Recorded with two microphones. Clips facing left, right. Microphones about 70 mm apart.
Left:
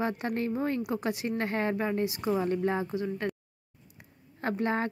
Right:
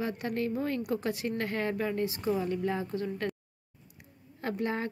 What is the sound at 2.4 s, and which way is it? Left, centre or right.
Speech, left.